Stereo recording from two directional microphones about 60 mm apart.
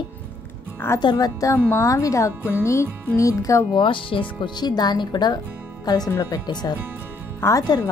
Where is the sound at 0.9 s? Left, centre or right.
Left.